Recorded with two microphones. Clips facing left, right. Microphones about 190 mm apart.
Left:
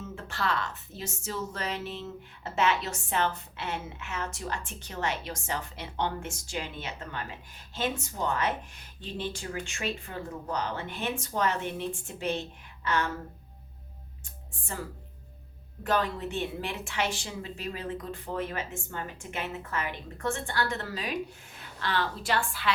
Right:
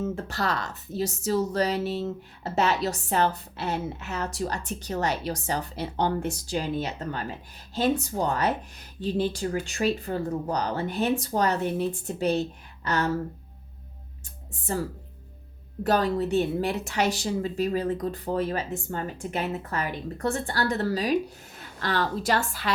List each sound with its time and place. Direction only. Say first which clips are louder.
0.0 s speech: right 5 dB; 40° right (ahead or behind)
15.8 s a woman's voice: right 5 dB; 40° right (ahead or behind)